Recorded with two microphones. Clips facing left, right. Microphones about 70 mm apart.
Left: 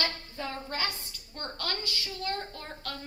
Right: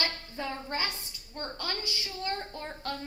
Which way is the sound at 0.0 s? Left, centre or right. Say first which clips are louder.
Even; right.